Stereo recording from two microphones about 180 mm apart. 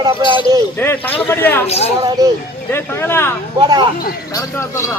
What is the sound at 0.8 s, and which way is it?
Speech, 10° left (ahead or behind).